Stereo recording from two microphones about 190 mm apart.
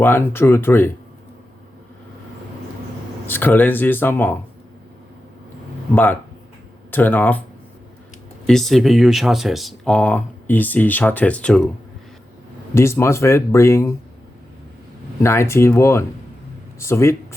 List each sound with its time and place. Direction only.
0.0 s speech: 10° left (ahead or behind)
3.2 s speech: 10° left (ahead or behind)
5.9 s speech: 10° left (ahead or behind)
8.4 s speech: centre (ahead or behind)
12.7 s speech: 15° left (ahead or behind)
15.2 s speech: 15° left (ahead or behind)